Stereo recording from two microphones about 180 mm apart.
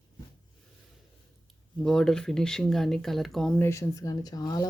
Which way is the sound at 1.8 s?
5° left (ahead or behind).